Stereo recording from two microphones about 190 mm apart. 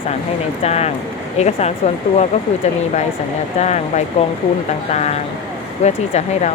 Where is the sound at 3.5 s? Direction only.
35° left (ahead or behind).